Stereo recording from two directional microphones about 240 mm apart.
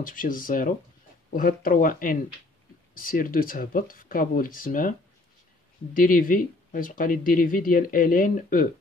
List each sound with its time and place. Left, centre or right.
0.0 s speech: left
5.9 s speech: left